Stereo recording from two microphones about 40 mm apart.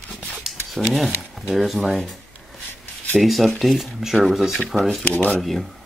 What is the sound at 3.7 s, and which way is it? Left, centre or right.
Speech, centre.